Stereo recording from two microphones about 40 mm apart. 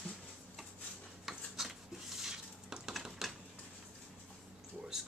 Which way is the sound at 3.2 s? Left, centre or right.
Centre.